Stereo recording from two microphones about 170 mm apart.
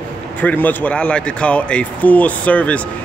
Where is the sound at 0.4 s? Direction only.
10° left (ahead or behind).